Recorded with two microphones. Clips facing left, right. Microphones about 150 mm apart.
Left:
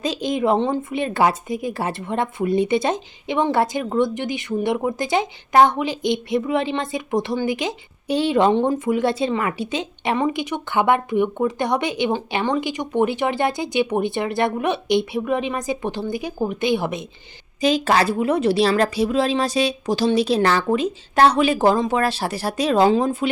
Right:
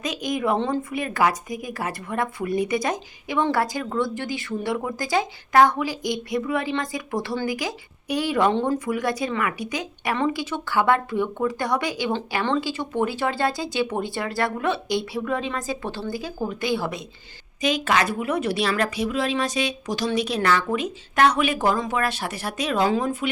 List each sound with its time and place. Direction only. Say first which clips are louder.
0.0 s speech: left 4 dB; 30° left (ahead or behind)
17.6 s a woman's voice: left 4 dB; 30° left (ahead or behind)